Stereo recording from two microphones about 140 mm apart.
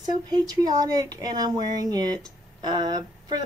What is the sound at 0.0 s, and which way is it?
Speech, 30° right (ahead or behind).